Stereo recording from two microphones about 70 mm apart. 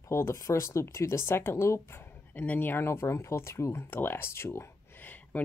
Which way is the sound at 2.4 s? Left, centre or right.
Left.